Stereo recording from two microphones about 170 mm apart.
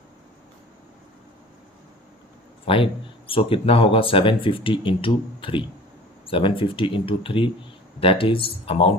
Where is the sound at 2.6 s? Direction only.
30° left (ahead or behind).